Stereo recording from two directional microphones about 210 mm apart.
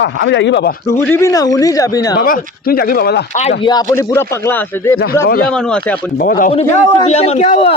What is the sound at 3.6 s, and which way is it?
Speech, 15° left (ahead or behind).